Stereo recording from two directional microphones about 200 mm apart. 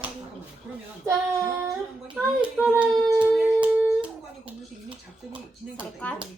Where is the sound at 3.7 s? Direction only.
5° right (ahead or behind).